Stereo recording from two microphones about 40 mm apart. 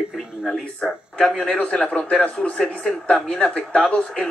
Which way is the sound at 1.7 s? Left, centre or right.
Left.